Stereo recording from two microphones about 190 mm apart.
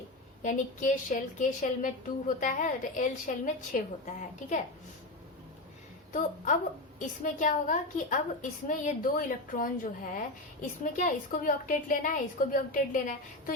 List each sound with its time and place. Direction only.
0.4 s a woman's voice: 40° left (ahead or behind)
6.1 s a woman's voice: 45° left (ahead or behind)